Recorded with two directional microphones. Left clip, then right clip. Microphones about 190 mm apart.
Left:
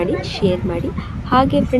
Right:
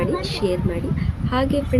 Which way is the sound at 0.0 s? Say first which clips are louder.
Left 3 dB; 10° left (ahead or behind).